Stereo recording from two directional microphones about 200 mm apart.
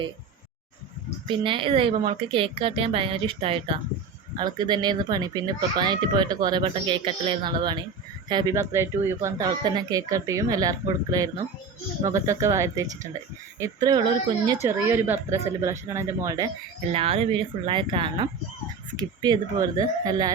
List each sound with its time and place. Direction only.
1.3 s a child's voice: 25° right (ahead or behind)
14.7 s speech: 10° right (ahead or behind)
16.9 s a child's voice: 30° right (ahead or behind)